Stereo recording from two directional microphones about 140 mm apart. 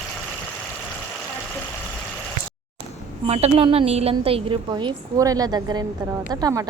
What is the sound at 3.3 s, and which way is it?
A woman's voice, 50° right (ahead or behind).